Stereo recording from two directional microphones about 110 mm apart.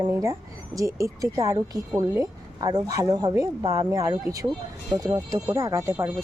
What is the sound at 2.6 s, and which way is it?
Speech, 40° right (ahead or behind).